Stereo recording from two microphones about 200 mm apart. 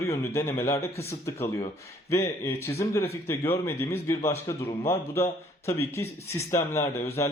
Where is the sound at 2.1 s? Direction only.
15° left (ahead or behind).